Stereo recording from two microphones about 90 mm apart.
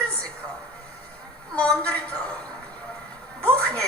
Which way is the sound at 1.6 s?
15° left (ahead or behind).